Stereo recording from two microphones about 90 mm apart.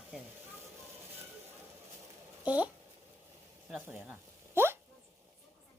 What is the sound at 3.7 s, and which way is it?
Hiccup, 20° right (ahead or behind).